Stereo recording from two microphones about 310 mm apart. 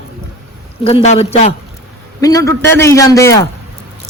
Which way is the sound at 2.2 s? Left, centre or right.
Centre.